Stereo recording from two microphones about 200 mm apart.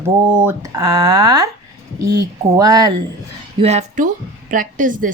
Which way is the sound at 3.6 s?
35° right (ahead or behind).